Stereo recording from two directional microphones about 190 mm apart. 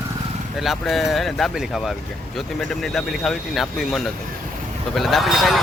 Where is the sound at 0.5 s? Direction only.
Centre (ahead or behind).